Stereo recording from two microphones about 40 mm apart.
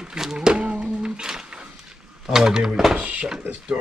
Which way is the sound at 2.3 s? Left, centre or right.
Centre.